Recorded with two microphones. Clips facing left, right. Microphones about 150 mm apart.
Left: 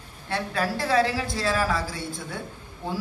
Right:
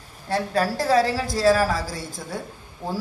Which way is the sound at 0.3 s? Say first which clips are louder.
Right 4 dB; 40° right (ahead or behind).